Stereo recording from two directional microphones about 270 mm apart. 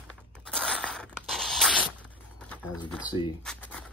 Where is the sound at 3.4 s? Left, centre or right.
Centre.